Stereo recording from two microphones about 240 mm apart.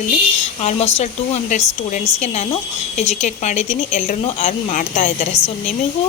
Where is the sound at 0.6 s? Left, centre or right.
Left.